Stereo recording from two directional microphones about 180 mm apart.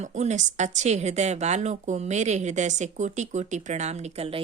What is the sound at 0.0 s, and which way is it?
Speech, 40° right (ahead or behind).